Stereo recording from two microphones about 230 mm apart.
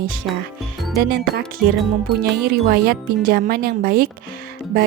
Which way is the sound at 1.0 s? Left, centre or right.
Right.